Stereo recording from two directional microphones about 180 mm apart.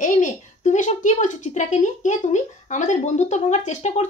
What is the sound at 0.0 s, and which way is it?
A child's voice, 45° left (ahead or behind).